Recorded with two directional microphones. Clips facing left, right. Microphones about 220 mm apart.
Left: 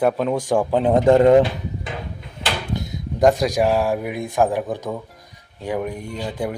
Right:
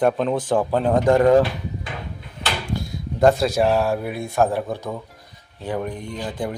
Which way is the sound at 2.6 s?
20° left (ahead or behind).